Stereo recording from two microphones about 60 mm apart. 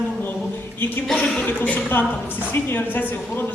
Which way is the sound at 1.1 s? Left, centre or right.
Centre.